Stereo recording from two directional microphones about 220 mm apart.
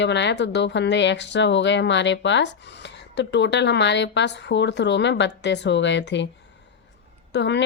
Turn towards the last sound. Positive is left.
turn(degrees=55)  # may be behind; listen again after turning